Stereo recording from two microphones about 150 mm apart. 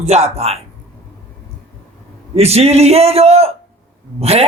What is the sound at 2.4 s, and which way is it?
A man's voice, 45° right (ahead or behind).